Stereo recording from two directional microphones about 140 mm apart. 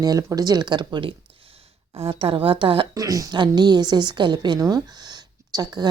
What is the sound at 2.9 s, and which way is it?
A woman's voice, 25° right (ahead or behind).